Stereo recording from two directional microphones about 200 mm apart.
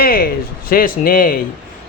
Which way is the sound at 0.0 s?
50° left (ahead or behind).